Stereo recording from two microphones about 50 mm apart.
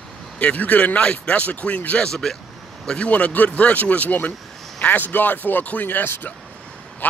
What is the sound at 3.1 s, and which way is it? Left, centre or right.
Speech, left.